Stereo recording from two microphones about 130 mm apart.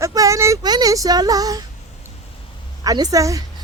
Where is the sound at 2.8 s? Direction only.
30° right (ahead or behind).